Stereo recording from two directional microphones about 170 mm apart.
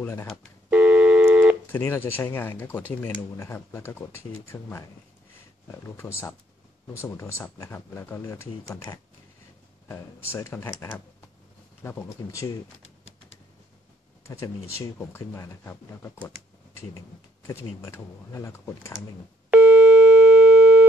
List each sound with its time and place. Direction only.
0.0 s speech: 15° left (ahead or behind)
0.7 s a sound: 10° right (ahead or behind)
1.7 s speech: 15° left (ahead or behind)
14.2 s speech: 15° left (ahead or behind)
17.5 s speech: 15° left (ahead or behind)
19.5 s busy signal: 10° right (ahead or behind)